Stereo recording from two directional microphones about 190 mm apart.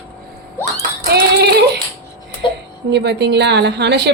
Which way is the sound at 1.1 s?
60° right (ahead or behind).